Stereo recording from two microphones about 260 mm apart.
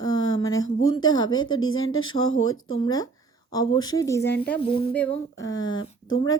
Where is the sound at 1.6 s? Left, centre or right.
Left.